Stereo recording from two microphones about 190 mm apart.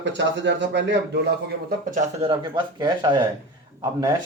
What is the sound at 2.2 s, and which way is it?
Speech, 25° right (ahead or behind).